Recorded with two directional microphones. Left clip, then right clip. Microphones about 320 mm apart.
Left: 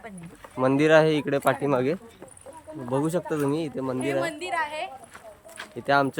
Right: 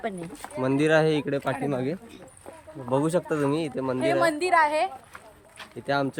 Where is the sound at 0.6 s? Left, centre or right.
Centre.